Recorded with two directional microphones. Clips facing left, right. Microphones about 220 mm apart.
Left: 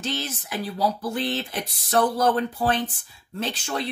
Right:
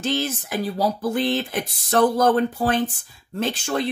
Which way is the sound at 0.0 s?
50° right (ahead or behind).